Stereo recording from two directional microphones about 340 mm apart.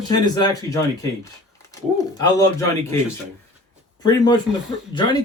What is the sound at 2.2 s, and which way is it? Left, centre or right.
Speech, centre.